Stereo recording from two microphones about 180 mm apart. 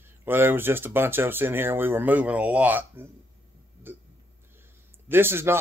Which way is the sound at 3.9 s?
10° right (ahead or behind).